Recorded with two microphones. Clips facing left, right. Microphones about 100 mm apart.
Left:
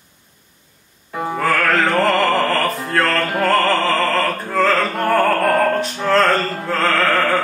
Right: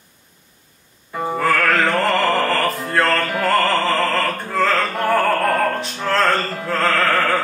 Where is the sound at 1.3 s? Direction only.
Centre (ahead or behind).